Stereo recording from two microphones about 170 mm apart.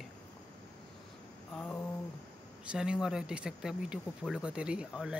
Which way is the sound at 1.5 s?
10° left (ahead or behind).